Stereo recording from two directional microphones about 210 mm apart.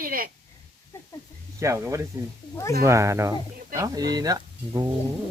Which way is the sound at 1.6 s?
15° right (ahead or behind).